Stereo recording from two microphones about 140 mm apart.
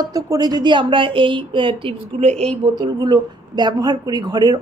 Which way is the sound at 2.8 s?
30° right (ahead or behind).